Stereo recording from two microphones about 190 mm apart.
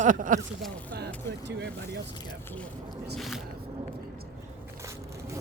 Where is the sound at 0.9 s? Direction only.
60° right (ahead or behind).